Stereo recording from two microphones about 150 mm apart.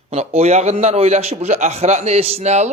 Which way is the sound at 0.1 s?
45° right (ahead or behind).